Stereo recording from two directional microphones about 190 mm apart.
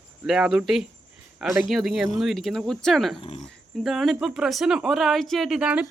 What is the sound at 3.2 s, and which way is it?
Speech, 30° left (ahead or behind).